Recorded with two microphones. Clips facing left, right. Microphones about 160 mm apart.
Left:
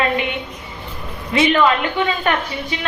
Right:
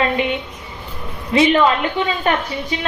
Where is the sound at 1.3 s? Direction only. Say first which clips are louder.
Right 1 dB; 30° right (ahead or behind).